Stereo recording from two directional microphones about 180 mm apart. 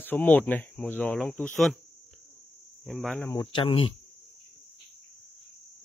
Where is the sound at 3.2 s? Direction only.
15° left (ahead or behind).